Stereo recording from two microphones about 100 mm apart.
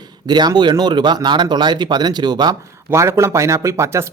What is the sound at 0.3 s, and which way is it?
Speech, 45° right (ahead or behind).